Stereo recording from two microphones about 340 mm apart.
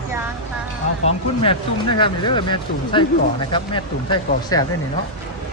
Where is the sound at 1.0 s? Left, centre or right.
Centre.